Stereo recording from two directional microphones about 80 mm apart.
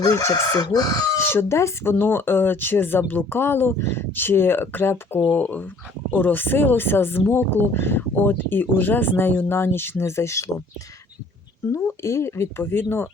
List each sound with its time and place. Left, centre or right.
0.1 s speech: left
0.6 s speech: left
1.1 s speech: left
12.0 s speech: left